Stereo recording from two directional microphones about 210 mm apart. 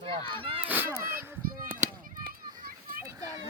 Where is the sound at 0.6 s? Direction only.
10° right (ahead or behind).